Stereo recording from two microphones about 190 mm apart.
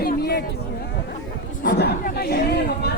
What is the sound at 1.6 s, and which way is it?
Chatter, 50° left (ahead or behind).